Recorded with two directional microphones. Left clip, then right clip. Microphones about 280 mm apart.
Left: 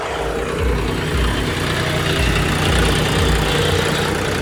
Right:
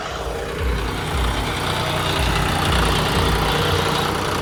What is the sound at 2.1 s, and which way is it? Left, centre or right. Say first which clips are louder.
Vehicle: left 2 dB; right.